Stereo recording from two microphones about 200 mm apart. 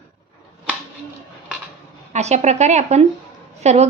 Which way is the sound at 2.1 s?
35° right (ahead or behind).